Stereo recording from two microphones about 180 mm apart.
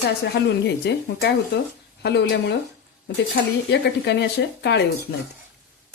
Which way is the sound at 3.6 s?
70° left (ahead or behind).